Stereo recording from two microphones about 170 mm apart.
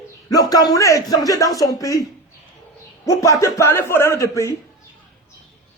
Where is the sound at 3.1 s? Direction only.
20° left (ahead or behind).